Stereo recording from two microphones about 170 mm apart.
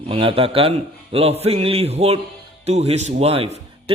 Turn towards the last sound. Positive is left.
turn(degrees=-35)  # may be behind; listen again after turning